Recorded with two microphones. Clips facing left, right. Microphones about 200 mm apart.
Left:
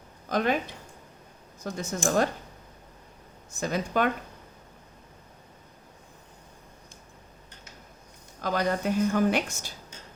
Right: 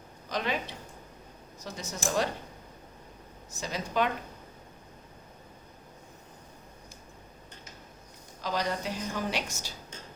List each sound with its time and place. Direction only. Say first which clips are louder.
0.3 s speech: left 6 dB; 50° left (ahead or behind)
1.6 s speech: left 6 dB; 50° left (ahead or behind)
3.6 s speech: left 4 dB; 50° left (ahead or behind)
8.4 s speech: left 4 dB; 55° left (ahead or behind)